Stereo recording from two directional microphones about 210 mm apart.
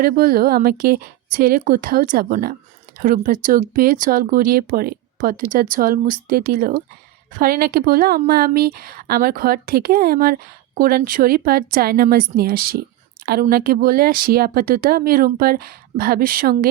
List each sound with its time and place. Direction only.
0.0 s speech: 45° right (ahead or behind)